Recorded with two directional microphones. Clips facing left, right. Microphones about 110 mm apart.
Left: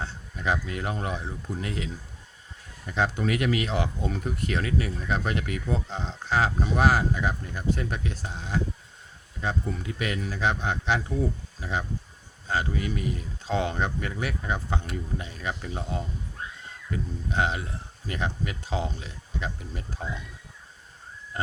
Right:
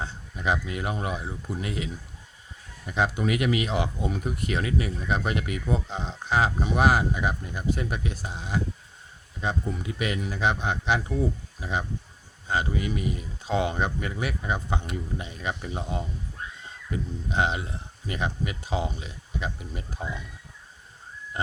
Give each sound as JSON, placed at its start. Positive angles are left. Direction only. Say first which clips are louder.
{"t": 0.0, "sound": "speech", "louder": "right 1 dB", "side_deg": -15}
{"t": 2.9, "sound": "speech", "louder": "right 1 dB", "side_deg": -15}